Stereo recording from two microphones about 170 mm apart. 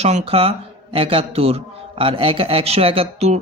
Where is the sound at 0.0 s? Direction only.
35° right (ahead or behind).